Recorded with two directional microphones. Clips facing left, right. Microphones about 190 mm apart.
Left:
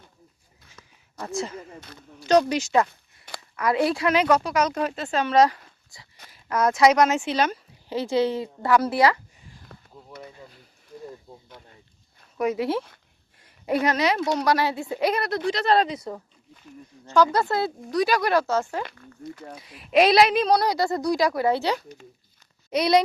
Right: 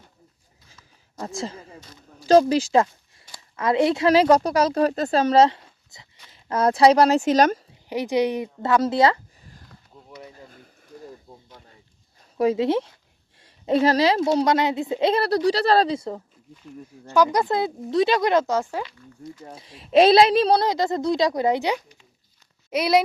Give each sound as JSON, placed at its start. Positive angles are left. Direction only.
{"t": 2.2, "sound": "a woman's voice", "side_deg": -30}
{"t": 4.1, "sound": "speech", "side_deg": -35}
{"t": 7.9, "sound": "a woman's voice", "side_deg": -15}
{"t": 9.7, "sound": "a sound", "side_deg": 60}
{"t": 12.4, "sound": "a woman's voice", "side_deg": -25}
{"t": 17.1, "sound": "speech", "side_deg": -15}
{"t": 18.9, "sound": "speech", "side_deg": 60}
{"t": 19.5, "sound": "a woman's voice", "side_deg": -30}
{"t": 22.7, "sound": "speech", "side_deg": -5}